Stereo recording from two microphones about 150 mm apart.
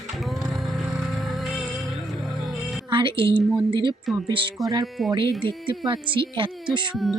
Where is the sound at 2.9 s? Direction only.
35° right (ahead or behind).